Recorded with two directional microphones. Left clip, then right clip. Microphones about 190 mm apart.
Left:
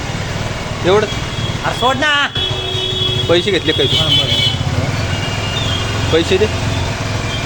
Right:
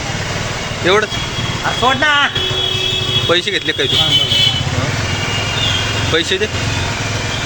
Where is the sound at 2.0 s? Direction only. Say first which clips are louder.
Right 2 dB; 25° left (ahead or behind).